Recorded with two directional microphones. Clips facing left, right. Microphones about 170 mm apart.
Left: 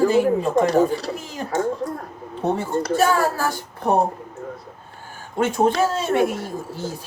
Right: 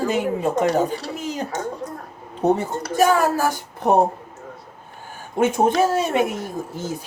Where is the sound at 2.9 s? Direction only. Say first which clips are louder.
Right 3 dB; 15° right (ahead or behind).